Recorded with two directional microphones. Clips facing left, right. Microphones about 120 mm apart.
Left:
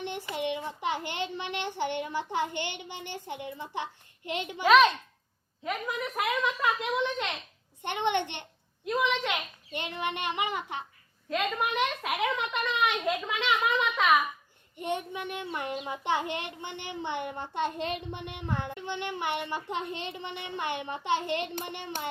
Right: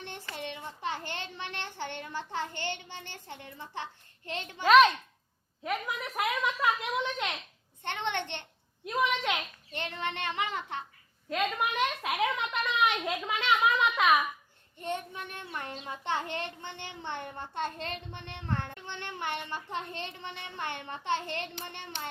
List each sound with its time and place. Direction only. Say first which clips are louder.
0.0 s a sound: left 7 dB; 15° left (ahead or behind)
4.3 s a child's voice: left 5 dB; 15° left (ahead or behind)
4.7 s a woman's voice: right 1 dB; centre (ahead or behind)
7.8 s a child's voice: left 5 dB; 15° left (ahead or behind)
9.0 s a woman's voice: left 1 dB; centre (ahead or behind)
9.7 s a child's voice: left 2 dB; 15° left (ahead or behind)
11.3 s a woman's voice: left 1 dB; centre (ahead or behind)
14.8 s a child's voice: left 3 dB; 15° left (ahead or behind)